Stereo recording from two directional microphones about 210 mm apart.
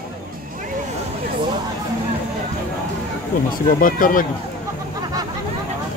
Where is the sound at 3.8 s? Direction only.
40° left (ahead or behind).